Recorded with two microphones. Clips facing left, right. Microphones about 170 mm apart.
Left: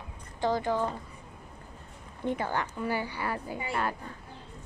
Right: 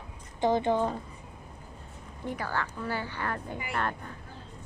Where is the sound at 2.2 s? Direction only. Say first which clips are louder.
Left 3 dB; 20° left (ahead or behind).